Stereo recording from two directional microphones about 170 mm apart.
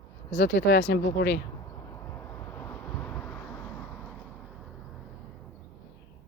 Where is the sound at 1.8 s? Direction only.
15° left (ahead or behind).